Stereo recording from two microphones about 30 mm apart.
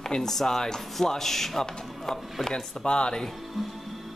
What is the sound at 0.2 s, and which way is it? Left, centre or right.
Speech, centre.